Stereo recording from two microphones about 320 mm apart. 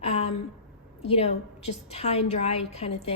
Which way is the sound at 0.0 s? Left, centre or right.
Centre.